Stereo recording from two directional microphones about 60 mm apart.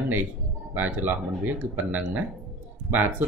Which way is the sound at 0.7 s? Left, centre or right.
Right.